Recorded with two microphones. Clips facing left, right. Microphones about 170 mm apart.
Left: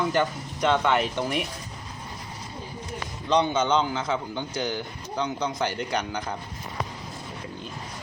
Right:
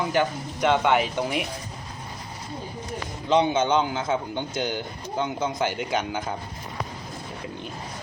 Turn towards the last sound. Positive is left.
turn(degrees=-15)  # may be behind; listen again after turning